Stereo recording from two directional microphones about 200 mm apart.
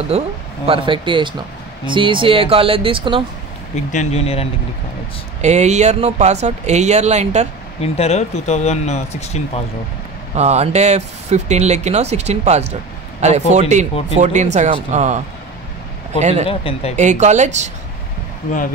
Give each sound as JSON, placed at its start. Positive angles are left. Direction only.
{"t": 0.1, "sound": "speech", "side_deg": -30}
{"t": 3.9, "sound": "speech", "side_deg": 35}
{"t": 5.4, "sound": "speech", "side_deg": -35}
{"t": 7.8, "sound": "speech", "side_deg": 30}
{"t": 10.3, "sound": "speech", "side_deg": -35}
{"t": 16.4, "sound": "speech", "side_deg": 25}
{"t": 16.9, "sound": "speech", "side_deg": -35}